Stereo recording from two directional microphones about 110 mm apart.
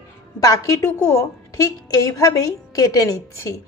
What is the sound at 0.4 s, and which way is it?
A woman's voice, 30° left (ahead or behind).